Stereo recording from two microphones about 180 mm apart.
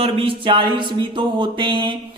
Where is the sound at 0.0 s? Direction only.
30° right (ahead or behind).